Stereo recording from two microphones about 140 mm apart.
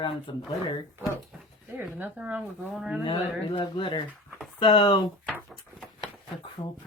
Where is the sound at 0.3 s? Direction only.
35° left (ahead or behind).